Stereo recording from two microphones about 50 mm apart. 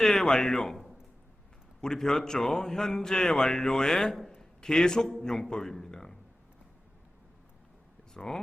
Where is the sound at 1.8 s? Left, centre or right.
Centre.